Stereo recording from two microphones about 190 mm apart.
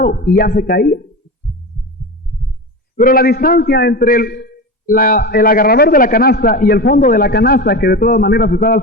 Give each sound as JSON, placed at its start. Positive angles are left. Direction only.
{"t": 0.0, "sound": "a man's voice", "side_deg": 45}
{"t": 2.9, "sound": "a man's voice", "side_deg": 50}